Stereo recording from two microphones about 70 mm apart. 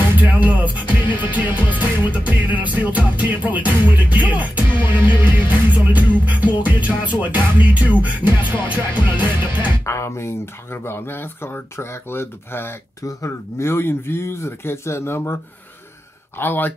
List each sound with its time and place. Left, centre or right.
0.2 s music: right
9.8 s speech: left